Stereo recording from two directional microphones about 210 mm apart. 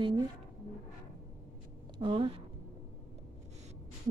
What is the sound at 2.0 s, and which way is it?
Speech, 25° right (ahead or behind).